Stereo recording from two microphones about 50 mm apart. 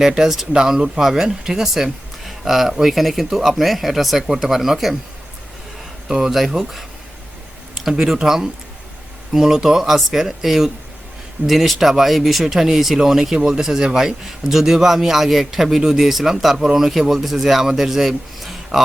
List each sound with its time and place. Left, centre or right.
0.0 s speech: centre
6.1 s speech: centre